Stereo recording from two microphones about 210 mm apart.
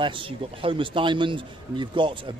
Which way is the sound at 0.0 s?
25° right (ahead or behind).